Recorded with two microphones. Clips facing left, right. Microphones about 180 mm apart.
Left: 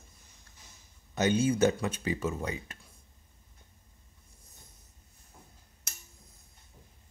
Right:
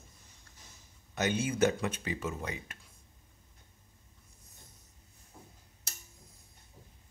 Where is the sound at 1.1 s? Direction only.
30° left (ahead or behind).